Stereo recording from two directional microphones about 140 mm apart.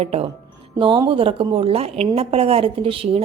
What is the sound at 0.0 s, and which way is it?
Speech, 45° right (ahead or behind).